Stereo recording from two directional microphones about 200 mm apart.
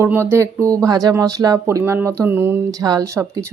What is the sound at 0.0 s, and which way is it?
Speech, 10° right (ahead or behind).